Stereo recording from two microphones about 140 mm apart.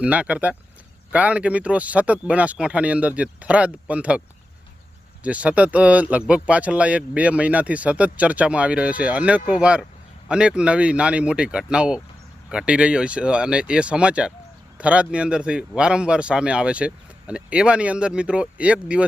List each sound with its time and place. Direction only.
0.0 s speech: 10° right (ahead or behind)
5.2 s speech: 10° right (ahead or behind)